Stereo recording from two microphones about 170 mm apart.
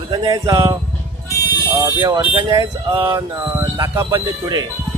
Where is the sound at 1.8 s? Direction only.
25° right (ahead or behind).